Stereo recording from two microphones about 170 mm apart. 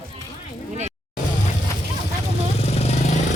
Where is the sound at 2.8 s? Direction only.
40° left (ahead or behind).